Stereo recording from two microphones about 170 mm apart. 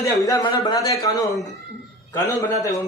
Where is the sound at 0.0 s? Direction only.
20° left (ahead or behind).